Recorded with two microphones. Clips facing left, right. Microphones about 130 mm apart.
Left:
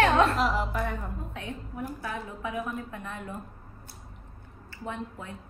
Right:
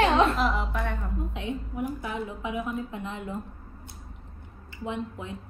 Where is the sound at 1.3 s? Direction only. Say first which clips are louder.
Right 5 dB; 20° right (ahead or behind).